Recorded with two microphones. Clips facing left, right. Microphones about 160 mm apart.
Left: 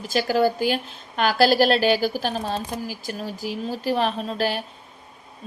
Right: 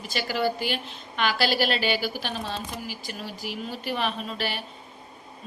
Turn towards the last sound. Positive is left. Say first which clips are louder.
# left 6 dB
turn(degrees=40)  # may be behind; listen again after turning